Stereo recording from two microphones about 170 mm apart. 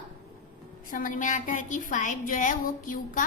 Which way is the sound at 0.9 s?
55° left (ahead or behind).